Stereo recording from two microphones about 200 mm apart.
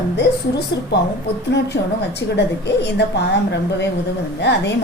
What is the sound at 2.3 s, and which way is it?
Speech, 55° left (ahead or behind).